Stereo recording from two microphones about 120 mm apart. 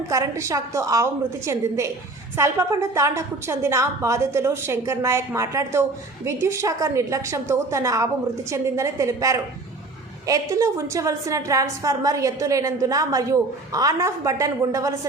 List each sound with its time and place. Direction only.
0.1 s a woman's voice: 25° right (ahead or behind)